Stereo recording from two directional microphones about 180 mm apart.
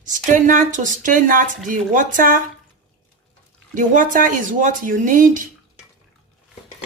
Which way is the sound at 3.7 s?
45° right (ahead or behind).